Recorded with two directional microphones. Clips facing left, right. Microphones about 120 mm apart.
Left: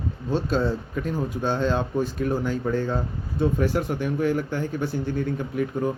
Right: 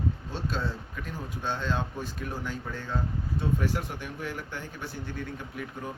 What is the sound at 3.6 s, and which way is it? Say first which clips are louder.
Speech: left 8 dB; 55° left (ahead or behind).